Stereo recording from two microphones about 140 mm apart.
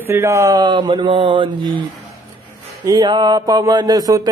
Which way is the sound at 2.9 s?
30° right (ahead or behind).